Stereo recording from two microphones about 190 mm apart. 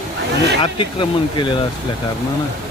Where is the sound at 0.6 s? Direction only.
25° left (ahead or behind).